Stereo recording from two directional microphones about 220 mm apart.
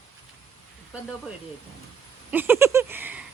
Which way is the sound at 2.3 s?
10° right (ahead or behind).